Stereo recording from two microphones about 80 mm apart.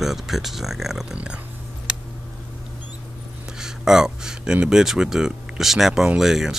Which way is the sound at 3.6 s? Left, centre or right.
Centre.